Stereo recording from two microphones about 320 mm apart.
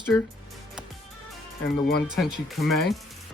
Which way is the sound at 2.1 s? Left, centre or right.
Centre.